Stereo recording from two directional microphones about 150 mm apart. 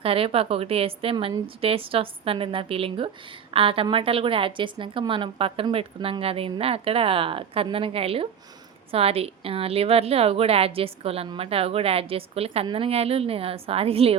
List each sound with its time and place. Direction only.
0.0 s a woman's voice: 40° right (ahead or behind)